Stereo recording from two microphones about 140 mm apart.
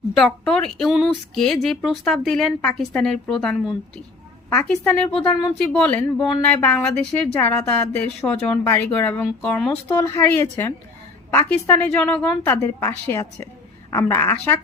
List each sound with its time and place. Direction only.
0.1 s speech: centre (ahead or behind)
4.4 s a woman's voice: 15° left (ahead or behind)
9.9 s a woman's voice: 25° left (ahead or behind)
10.2 s a woman's voice: 15° left (ahead or behind)